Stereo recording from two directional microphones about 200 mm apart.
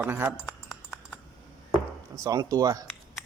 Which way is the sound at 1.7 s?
15° right (ahead or behind).